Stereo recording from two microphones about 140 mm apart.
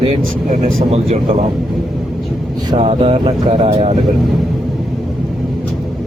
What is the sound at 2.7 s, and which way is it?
Speech, 45° right (ahead or behind).